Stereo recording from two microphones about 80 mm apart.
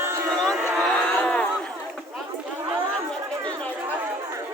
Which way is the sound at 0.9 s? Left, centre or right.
Centre.